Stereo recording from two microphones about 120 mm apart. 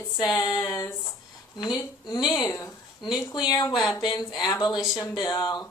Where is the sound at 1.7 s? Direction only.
35° left (ahead or behind).